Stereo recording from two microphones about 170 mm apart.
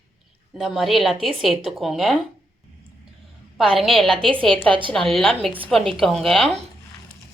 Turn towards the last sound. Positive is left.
turn(degrees=0)  # may be behind; listen again after turning